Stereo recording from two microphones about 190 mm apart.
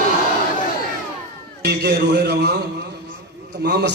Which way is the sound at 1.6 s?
60° right (ahead or behind).